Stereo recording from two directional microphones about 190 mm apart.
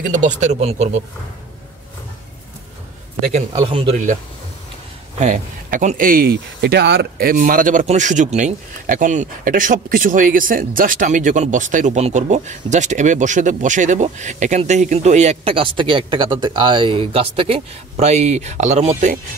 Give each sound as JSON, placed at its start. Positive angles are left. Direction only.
{"t": 0.1, "sound": "speech", "side_deg": -40}
{"t": 3.3, "sound": "speech", "side_deg": -35}
{"t": 5.2, "sound": "speech", "side_deg": -40}